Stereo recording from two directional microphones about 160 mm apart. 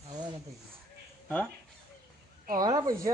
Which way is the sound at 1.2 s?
5° left (ahead or behind).